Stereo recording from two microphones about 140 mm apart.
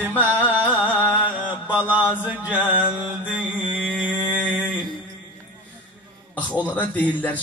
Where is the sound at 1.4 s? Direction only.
10° right (ahead or behind).